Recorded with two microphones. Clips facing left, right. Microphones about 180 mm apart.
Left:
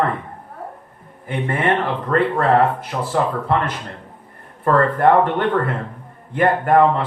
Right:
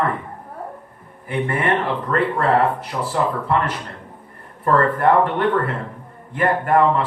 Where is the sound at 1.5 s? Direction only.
45° left (ahead or behind).